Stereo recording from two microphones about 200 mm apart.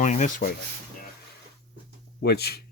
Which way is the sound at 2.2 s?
55° left (ahead or behind).